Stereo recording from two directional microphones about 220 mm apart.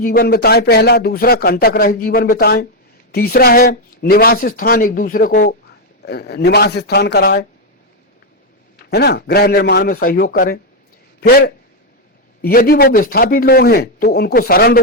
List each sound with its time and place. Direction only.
0.0 s speech: 40° left (ahead or behind)
8.9 s speech: 45° left (ahead or behind)